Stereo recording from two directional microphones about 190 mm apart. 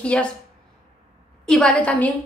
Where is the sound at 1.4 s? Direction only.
5° left (ahead or behind).